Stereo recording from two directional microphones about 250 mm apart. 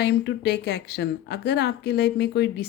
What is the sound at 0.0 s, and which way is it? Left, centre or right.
Speech, left.